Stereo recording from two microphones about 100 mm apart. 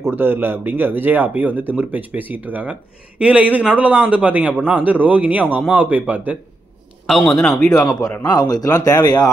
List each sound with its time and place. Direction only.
0.0 s speech: 20° right (ahead or behind)
7.1 s a man's voice: centre (ahead or behind)
8.2 s speech: 45° left (ahead or behind)